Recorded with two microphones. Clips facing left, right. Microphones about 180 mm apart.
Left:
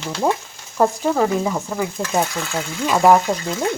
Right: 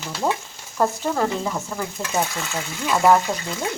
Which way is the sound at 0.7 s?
10° left (ahead or behind).